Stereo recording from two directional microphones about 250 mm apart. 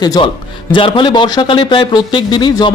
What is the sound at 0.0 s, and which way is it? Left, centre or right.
A man's voice, centre.